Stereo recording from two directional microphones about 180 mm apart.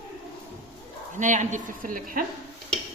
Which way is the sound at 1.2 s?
45° right (ahead or behind).